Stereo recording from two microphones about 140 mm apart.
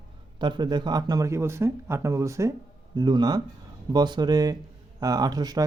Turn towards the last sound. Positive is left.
turn(degrees=-30)  # may be behind; listen again after turning